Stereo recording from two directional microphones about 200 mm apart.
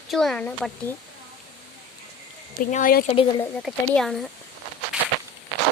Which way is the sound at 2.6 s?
40° left (ahead or behind).